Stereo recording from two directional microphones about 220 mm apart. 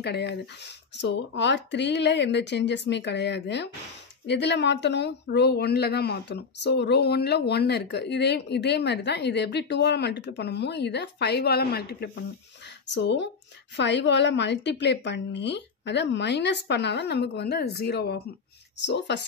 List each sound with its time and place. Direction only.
0.0 s speech: 50° left (ahead or behind)